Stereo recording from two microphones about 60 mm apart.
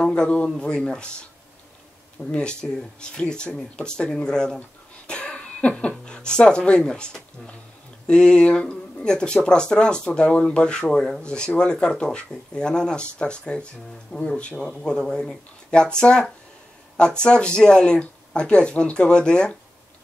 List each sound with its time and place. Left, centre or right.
0.0 s a man's voice: centre
2.3 s speech: centre